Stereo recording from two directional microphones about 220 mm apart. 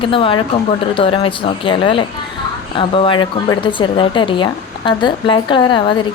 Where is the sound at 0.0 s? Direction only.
25° left (ahead or behind).